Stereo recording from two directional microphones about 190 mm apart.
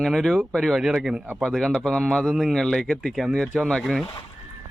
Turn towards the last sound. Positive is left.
turn(degrees=0)  # may be behind; listen again after turning